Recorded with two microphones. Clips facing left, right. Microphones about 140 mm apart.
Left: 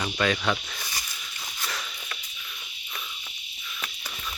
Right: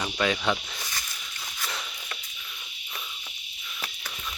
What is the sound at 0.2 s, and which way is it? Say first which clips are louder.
Speech: even; 10° right (ahead or behind).